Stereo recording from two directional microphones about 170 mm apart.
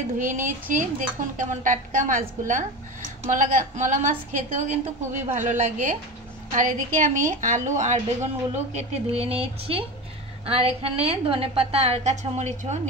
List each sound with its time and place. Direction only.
0.2 s a woman's voice: 50° right (ahead or behind)